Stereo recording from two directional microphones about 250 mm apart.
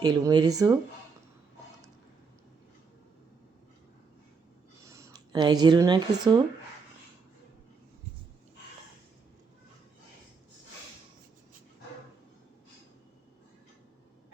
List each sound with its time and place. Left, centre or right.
0.0 s speech: centre
4.9 s speech: centre